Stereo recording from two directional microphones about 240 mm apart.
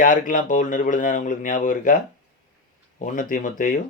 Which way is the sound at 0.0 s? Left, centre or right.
Left.